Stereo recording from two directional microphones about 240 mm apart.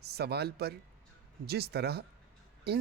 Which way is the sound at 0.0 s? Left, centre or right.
Right.